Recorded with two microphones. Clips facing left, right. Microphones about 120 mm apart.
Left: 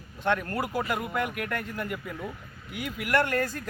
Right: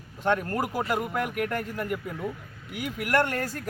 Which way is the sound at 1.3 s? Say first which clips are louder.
Right 3 dB; 40° right (ahead or behind).